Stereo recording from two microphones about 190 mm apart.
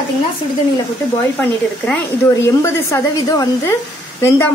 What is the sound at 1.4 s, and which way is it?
A woman's voice, 10° left (ahead or behind).